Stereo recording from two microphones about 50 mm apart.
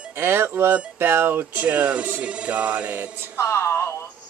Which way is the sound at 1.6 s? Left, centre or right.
Right.